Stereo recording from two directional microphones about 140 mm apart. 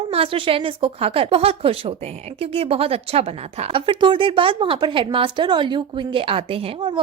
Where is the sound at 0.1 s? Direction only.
40° right (ahead or behind).